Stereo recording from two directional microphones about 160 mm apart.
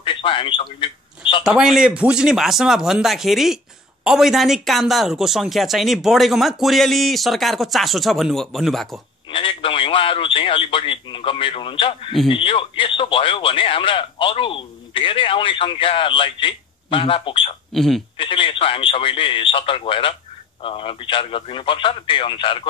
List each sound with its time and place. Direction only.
0.0 s a sound: 30° left (ahead or behind)
1.4 s speech: 5° right (ahead or behind)
9.3 s a man's voice: 35° left (ahead or behind)
17.7 s speech: centre (ahead or behind)
18.1 s a man's voice: 30° left (ahead or behind)